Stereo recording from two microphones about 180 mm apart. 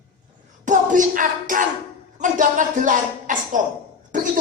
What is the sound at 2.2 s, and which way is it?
Speech, 45° right (ahead or behind).